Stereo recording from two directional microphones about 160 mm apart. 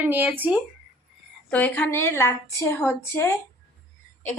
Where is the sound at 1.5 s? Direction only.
10° left (ahead or behind).